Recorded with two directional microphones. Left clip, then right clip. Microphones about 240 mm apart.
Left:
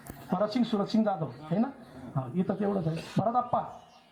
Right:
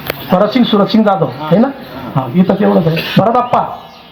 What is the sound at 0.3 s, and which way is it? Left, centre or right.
Speech, left.